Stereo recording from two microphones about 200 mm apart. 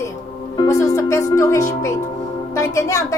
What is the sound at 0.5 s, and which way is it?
A woman's voice, 15° left (ahead or behind).